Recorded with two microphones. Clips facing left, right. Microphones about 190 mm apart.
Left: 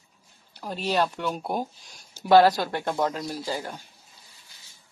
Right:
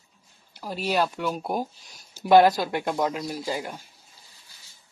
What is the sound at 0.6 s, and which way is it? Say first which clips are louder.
Speech: even; 10° right (ahead or behind).